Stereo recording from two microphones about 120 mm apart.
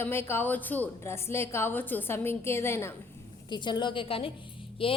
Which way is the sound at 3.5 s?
40° left (ahead or behind).